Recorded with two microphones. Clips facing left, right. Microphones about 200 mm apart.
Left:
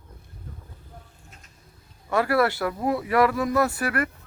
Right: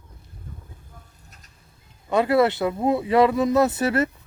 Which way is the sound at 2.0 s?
20° right (ahead or behind).